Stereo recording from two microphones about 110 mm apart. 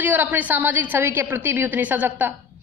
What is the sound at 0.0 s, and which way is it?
A man's voice, 15° right (ahead or behind).